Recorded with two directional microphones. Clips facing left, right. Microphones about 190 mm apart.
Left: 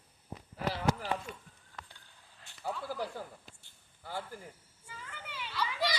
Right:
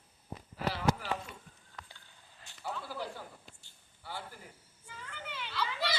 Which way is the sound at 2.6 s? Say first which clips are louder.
Left 2 dB; 40° left (ahead or behind).